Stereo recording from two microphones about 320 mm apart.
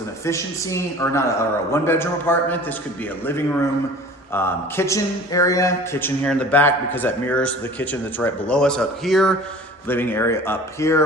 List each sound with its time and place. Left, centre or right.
0.3 s a man's voice: centre
4.4 s a sound: centre
9.8 s a man's voice: centre